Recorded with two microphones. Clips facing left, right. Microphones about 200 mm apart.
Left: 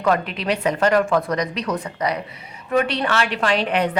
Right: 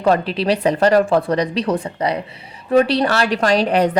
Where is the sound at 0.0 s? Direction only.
30° right (ahead or behind).